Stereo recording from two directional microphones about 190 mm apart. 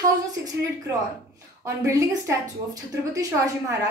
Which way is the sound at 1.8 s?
15° right (ahead or behind).